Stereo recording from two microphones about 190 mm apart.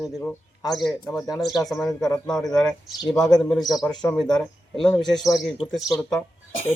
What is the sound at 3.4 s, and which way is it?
Speech, centre (ahead or behind).